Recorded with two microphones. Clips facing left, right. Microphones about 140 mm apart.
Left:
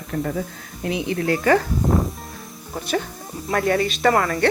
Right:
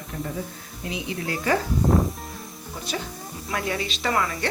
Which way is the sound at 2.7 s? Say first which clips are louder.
Left 7 dB; 55° left (ahead or behind).